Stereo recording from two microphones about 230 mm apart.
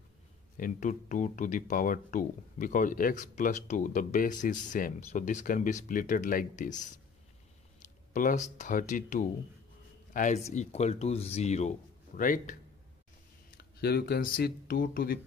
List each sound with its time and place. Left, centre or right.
0.6 s speech: left
8.1 s speech: left
13.7 s speech: left